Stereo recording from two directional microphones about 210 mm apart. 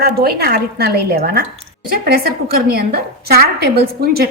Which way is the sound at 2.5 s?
45° right (ahead or behind).